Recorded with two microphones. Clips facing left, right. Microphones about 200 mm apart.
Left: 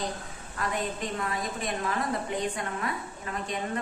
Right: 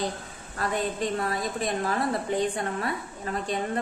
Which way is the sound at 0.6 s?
35° right (ahead or behind).